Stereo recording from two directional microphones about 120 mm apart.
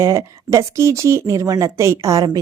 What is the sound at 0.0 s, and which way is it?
A woman's voice, 25° right (ahead or behind).